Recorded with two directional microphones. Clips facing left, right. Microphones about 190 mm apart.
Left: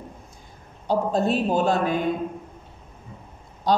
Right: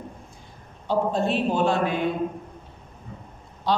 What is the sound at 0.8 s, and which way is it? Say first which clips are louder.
A man's voice: left 1 dB; 40° left (ahead or behind).